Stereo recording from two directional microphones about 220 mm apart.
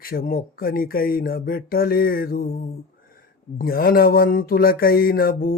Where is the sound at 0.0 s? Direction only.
40° left (ahead or behind).